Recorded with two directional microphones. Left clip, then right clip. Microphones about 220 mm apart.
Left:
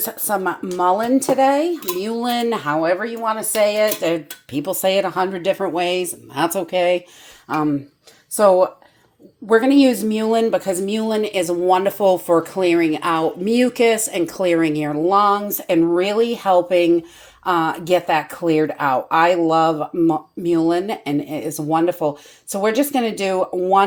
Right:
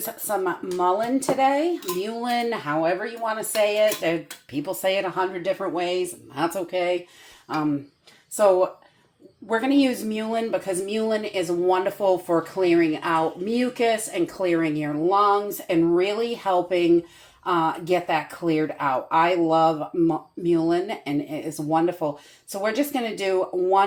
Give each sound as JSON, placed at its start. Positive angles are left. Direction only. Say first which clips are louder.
{"t": 0.0, "sound": "speech", "louder": "left 4 dB", "side_deg": 50}
{"t": 8.4, "sound": "speech", "louder": "left 5 dB", "side_deg": 50}